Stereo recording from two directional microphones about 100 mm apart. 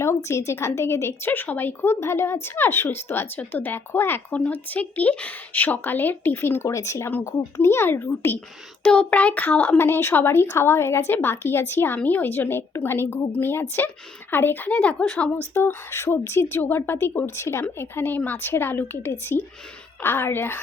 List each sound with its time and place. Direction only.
0.0 s a woman's voice: 30° left (ahead or behind)
8.8 s a woman's voice: 10° left (ahead or behind)
15.5 s a woman's voice: 25° left (ahead or behind)